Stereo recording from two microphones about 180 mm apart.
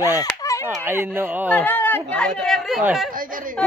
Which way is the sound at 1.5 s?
10° left (ahead or behind).